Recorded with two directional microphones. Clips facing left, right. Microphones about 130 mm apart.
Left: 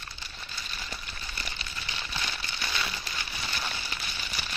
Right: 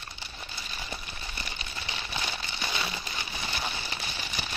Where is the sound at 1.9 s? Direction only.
20° right (ahead or behind).